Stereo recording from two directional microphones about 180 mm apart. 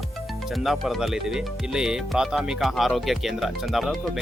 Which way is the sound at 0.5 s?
Centre (ahead or behind).